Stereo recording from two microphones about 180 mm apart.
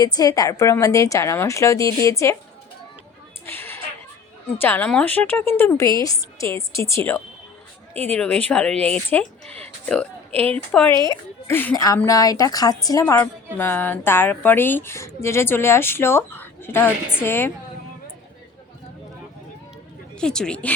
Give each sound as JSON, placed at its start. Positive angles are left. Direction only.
{"t": 0.0, "sound": "speech", "side_deg": 20}
{"t": 3.4, "sound": "a sound", "side_deg": 10}
{"t": 4.5, "sound": "a woman's voice", "side_deg": 10}
{"t": 20.1, "sound": "speech", "side_deg": 5}